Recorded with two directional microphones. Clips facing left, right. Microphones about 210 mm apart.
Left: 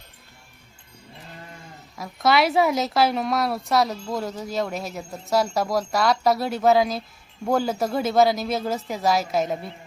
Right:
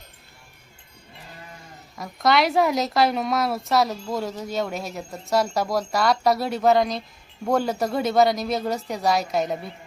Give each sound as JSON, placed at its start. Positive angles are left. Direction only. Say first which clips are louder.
{"t": 2.0, "sound": "a woman's voice", "louder": "even", "side_deg": 0}